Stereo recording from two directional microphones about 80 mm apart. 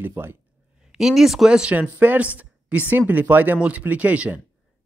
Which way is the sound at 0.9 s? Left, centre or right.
Centre.